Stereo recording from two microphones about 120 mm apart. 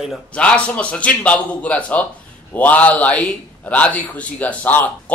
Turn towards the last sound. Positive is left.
turn(degrees=15)  # may be behind; listen again after turning